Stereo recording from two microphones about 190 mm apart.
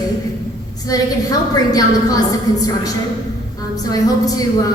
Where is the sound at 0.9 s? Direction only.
20° left (ahead or behind).